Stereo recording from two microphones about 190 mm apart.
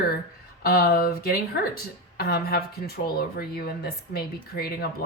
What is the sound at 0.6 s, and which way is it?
Speech, 50° left (ahead or behind).